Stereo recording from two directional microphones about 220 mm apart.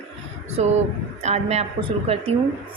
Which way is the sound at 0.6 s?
30° right (ahead or behind).